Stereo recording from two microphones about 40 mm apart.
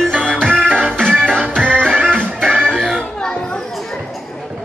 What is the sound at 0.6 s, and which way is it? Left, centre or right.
Music, right.